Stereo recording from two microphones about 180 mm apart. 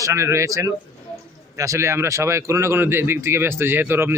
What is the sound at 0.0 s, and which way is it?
A man's voice, 15° right (ahead or behind).